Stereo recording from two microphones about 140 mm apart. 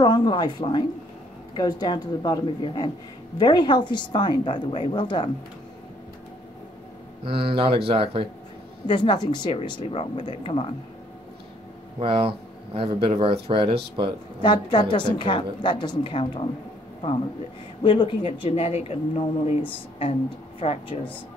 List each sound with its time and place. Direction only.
0.0 s a woman's voice: 30° left (ahead or behind)
7.2 s speech: 40° right (ahead or behind)
8.8 s a woman's voice: 35° left (ahead or behind)
12.0 s speech: 40° right (ahead or behind)
14.4 s a woman's voice: 35° left (ahead or behind)
17.8 s speech: 35° left (ahead or behind)